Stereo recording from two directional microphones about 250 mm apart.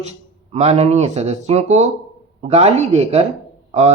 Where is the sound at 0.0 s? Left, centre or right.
Right.